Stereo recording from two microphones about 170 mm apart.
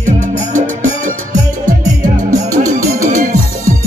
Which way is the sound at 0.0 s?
50° right (ahead or behind).